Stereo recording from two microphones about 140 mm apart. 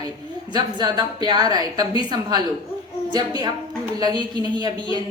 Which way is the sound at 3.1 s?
30° right (ahead or behind).